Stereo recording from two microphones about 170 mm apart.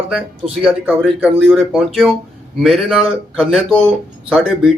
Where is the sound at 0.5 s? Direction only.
5° right (ahead or behind).